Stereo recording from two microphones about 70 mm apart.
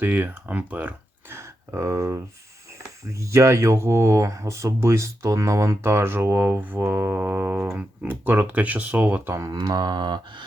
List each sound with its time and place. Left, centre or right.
0.0 s speech: right
1.3 s speech: right
9.5 s a sound: right